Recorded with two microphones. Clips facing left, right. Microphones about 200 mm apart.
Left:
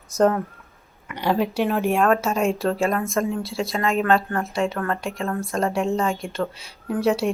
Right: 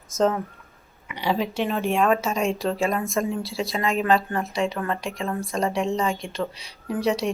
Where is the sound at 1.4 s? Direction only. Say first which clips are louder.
Left 3 dB; 10° left (ahead or behind).